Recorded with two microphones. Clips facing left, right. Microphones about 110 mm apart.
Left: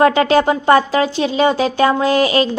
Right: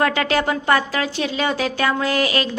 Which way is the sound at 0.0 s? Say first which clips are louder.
Left 7 dB; 25° left (ahead or behind).